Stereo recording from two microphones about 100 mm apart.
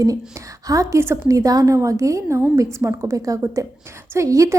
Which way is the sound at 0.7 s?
30° right (ahead or behind).